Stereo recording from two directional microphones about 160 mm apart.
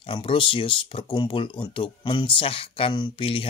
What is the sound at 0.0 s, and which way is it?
Speech, 35° left (ahead or behind).